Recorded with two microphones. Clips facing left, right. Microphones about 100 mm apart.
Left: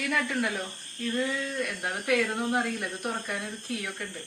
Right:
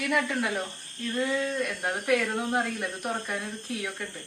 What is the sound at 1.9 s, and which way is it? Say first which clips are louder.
Speech: right 1 dB; 15° right (ahead or behind).